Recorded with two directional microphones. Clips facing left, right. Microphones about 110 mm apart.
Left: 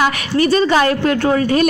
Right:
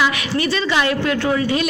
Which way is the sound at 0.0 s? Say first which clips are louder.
Left 4 dB; 45° left (ahead or behind).